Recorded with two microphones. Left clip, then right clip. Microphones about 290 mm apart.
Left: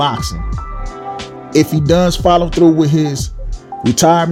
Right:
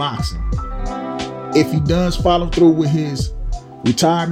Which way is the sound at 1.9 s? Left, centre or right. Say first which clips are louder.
Left 8 dB; left.